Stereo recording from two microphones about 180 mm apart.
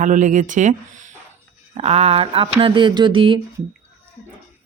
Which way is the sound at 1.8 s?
35° right (ahead or behind).